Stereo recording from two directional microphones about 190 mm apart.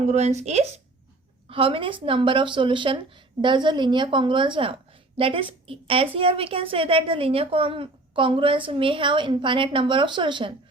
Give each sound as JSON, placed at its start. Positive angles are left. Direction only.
{"t": 0.0, "sound": "a woman's voice", "side_deg": -35}